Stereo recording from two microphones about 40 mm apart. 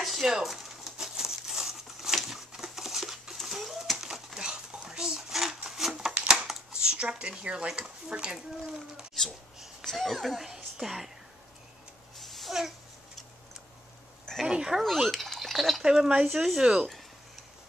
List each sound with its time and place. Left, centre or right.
0.0 s crumpling: centre
3.4 s a sound: centre
4.0 s bird: centre
4.5 s a sound: centre
7.4 s speech: right
9.2 s a sound: centre
9.9 s speech: centre
10.4 s speech: centre
12.2 s a sound: centre
14.4 s speech: centre
14.8 s speech: centre
15.8 s speech: centre